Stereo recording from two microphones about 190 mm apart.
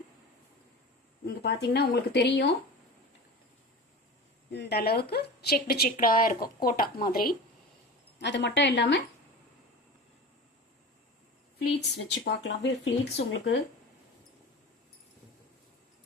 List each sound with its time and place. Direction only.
1.4 s speech: 60° left (ahead or behind)
4.5 s a woman's voice: 60° left (ahead or behind)
8.2 s a woman's voice: 65° left (ahead or behind)
11.7 s a woman's voice: 60° left (ahead or behind)